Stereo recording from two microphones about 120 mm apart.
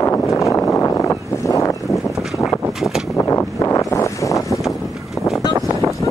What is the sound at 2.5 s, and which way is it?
Vehicle, centre (ahead or behind).